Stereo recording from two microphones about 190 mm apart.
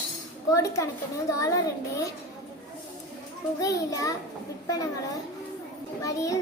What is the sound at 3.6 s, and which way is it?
A child's voice, 15° left (ahead or behind).